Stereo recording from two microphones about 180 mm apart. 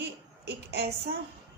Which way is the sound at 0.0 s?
65° right (ahead or behind).